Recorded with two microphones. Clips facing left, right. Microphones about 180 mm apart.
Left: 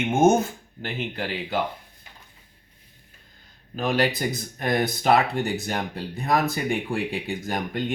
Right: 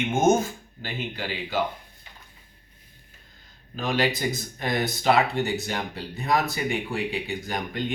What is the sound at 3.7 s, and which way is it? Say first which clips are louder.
Speech: left 2 dB; 55° left (ahead or behind).